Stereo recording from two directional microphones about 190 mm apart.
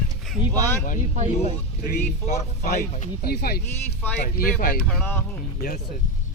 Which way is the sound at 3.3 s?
55° left (ahead or behind).